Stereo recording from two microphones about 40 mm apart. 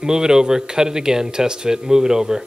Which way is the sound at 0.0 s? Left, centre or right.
Centre.